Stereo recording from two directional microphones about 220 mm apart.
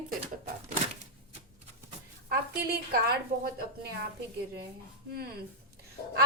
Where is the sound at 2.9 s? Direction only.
40° right (ahead or behind).